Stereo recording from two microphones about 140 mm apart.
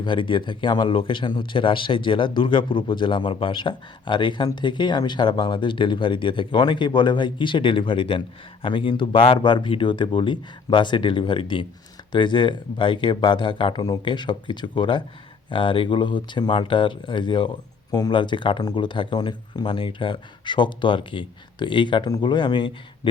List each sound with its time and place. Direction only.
0.0 s speech: 35° left (ahead or behind)